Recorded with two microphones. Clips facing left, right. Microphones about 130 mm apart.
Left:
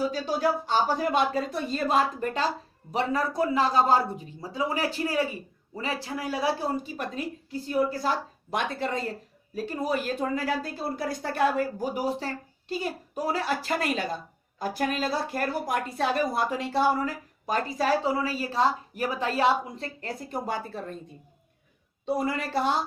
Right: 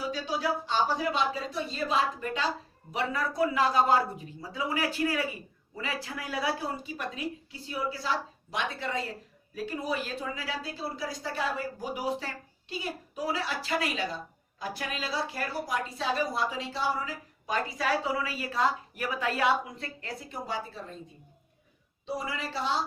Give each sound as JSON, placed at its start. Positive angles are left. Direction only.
{"t": 0.1, "sound": "a woman's voice", "side_deg": 45}
{"t": 22.0, "sound": "a woman's voice", "side_deg": 50}